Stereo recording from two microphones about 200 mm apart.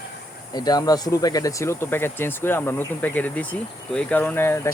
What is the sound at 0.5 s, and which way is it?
Speech, 20° left (ahead or behind).